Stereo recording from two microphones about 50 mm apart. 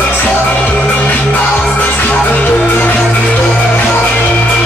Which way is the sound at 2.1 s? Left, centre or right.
Left.